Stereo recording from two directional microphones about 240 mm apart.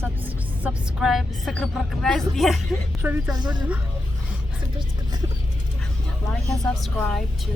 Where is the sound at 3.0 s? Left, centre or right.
Centre.